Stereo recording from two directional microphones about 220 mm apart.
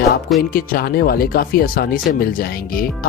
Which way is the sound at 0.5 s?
40° left (ahead or behind).